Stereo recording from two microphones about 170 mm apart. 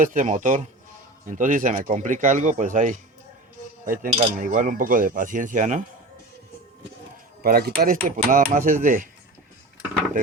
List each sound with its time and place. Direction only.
0.0 s speech: 50° right (ahead or behind)
7.4 s speech: 60° right (ahead or behind)